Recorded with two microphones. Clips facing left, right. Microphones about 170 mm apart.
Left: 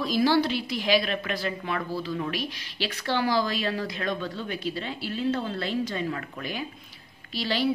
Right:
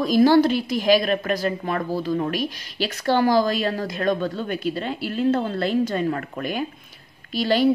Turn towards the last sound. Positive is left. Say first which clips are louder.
# right 8 dB
turn(degrees=-45)  # may be behind; listen again after turning